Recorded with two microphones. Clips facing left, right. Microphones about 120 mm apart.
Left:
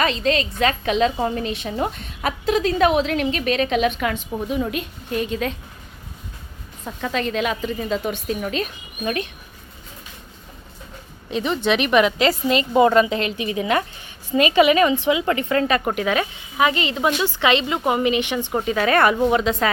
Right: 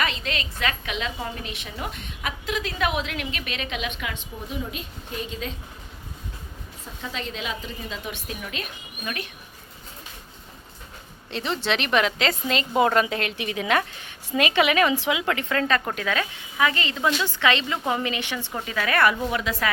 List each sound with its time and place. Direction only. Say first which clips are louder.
0.0 s a woman's voice: left 8 dB; 35° left (ahead or behind)
4.6 s a woman's voice: left 8 dB; 65° left (ahead or behind)
6.8 s a woman's voice: left 9 dB; 65° left (ahead or behind)
7.9 s a woman's voice: left 11 dB; 45° left (ahead or behind)
11.3 s a woman's voice: left 6 dB; 10° left (ahead or behind)
15.6 s a woman's voice: left 4 dB; 15° left (ahead or behind)